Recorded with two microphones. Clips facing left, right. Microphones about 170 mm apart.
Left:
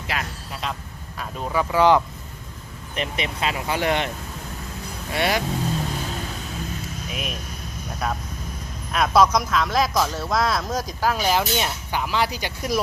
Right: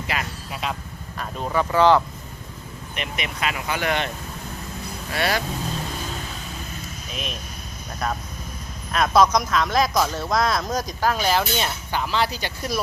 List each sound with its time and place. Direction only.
0.1 s a sound: 5° right (ahead or behind)
1.2 s speech: 5° left (ahead or behind)
2.9 s speech: 30° left (ahead or behind)
5.1 s speech: 20° left (ahead or behind)
7.1 s speech: 10° left (ahead or behind)